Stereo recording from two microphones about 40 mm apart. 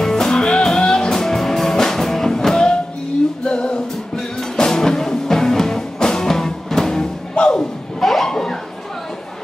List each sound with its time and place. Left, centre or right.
0.0 s music: centre
7.3 s music: left
8.0 s a sound: centre